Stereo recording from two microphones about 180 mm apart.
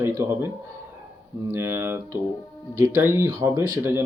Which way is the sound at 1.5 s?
15° right (ahead or behind).